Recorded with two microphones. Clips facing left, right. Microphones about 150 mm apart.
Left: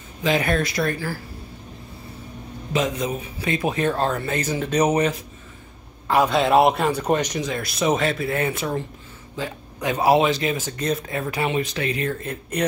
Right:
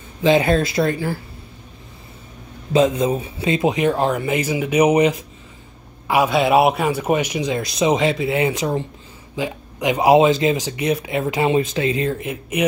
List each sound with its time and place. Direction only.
0.2 s speech: 25° right (ahead or behind)
2.7 s a man's voice: 30° right (ahead or behind)
10.8 s speech: 10° right (ahead or behind)
12.2 s a man's voice: 5° right (ahead or behind)